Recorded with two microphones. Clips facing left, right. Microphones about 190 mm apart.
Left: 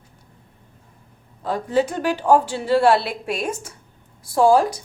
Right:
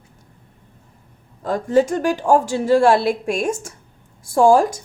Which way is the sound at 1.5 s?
45° right (ahead or behind).